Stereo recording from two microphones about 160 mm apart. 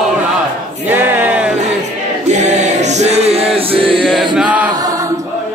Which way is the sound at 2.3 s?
45° right (ahead or behind).